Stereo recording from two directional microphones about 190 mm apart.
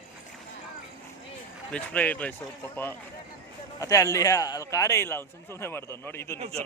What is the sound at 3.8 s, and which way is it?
A man's voice, 15° left (ahead or behind).